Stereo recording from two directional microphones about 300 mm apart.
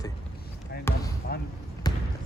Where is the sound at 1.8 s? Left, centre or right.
Centre.